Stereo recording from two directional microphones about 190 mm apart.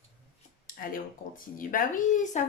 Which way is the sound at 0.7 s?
45° left (ahead or behind).